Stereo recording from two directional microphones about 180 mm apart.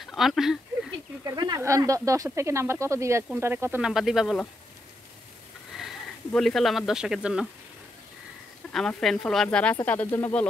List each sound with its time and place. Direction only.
0.0 s speech: centre (ahead or behind)
1.2 s speech: 20° right (ahead or behind); by 4.5 s centre (ahead or behind)
5.8 s speech: centre (ahead or behind)
8.7 s speech: centre (ahead or behind)